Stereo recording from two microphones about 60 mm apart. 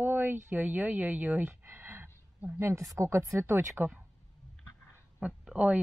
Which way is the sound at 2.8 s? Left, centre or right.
Right.